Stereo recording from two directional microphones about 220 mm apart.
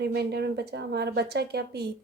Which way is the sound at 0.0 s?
50° right (ahead or behind).